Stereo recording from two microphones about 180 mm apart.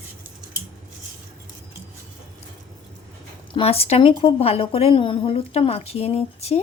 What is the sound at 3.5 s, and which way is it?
A woman's voice, 35° left (ahead or behind).